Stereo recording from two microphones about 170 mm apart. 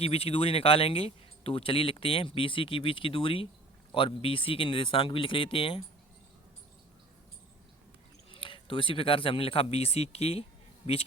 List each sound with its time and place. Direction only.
0.0 s speech: 35° left (ahead or behind)
8.3 s speech: 30° left (ahead or behind)